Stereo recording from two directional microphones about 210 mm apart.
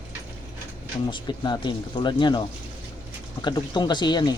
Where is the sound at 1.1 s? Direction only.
20° left (ahead or behind).